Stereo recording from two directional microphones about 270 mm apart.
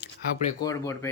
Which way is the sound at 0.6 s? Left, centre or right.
Centre.